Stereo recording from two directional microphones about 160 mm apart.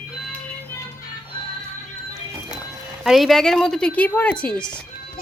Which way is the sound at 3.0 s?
Centre (ahead or behind).